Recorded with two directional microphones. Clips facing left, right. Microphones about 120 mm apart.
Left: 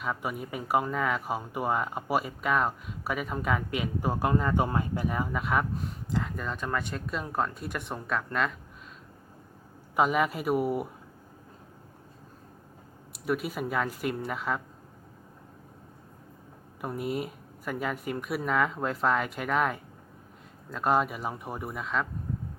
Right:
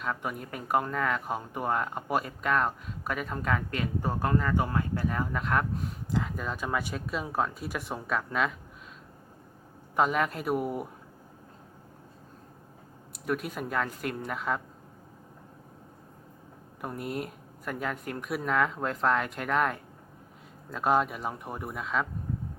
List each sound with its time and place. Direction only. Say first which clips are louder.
0.0 s speech: left 1 dB; 5° left (ahead or behind)
9.9 s speech: left 1 dB; 5° left (ahead or behind)
13.2 s speech: left 2 dB; 5° left (ahead or behind)
16.8 s speech: left 3 dB; centre (ahead or behind)